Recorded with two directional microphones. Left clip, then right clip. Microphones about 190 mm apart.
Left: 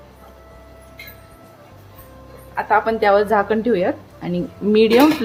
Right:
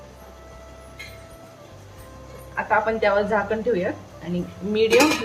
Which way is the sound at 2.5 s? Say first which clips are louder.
Left 4 dB; 55° left (ahead or behind).